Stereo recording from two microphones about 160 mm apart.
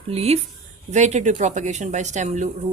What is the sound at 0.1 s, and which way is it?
A woman's voice, 40° right (ahead or behind).